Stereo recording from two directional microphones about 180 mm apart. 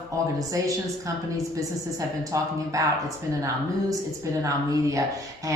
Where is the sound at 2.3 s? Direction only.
15° right (ahead or behind).